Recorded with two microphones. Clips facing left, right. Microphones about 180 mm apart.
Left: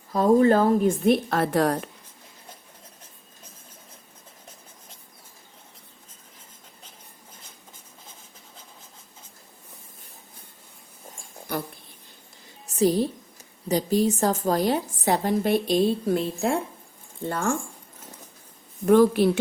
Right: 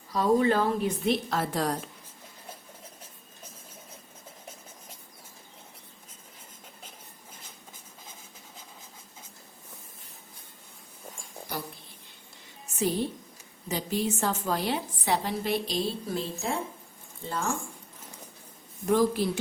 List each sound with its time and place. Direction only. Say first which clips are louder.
0.1 s a woman's voice: left 6 dB; 45° left (ahead or behind); by 1.9 s 60° left (ahead or behind)
12.6 s a sound: left 7 dB; 35° left (ahead or behind)
13.7 s a woman's voice: left 8 dB; 40° left (ahead or behind); by 16.2 s 55° left (ahead or behind)
17.2 s a woman's voice: left 5 dB; 55° left (ahead or behind)
18.9 s a woman's voice: left 7 dB; 65° left (ahead or behind)